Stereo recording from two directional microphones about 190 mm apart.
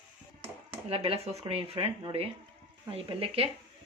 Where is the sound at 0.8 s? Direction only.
30° right (ahead or behind).